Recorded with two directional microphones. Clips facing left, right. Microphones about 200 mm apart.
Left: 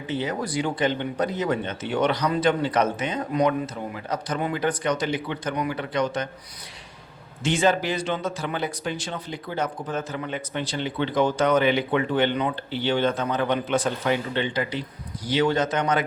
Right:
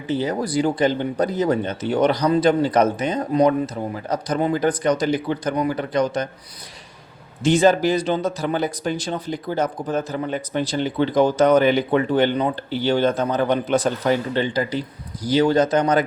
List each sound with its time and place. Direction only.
0.1 s speech: 35° right (ahead or behind)
7.4 s speech: 40° right (ahead or behind)